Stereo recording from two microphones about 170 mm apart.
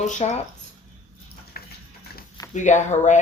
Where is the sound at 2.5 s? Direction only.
45° left (ahead or behind).